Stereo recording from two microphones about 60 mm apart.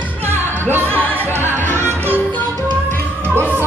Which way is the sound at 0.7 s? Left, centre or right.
Right.